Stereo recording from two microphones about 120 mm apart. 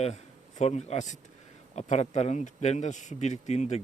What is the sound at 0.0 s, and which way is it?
A man's voice, 65° left (ahead or behind).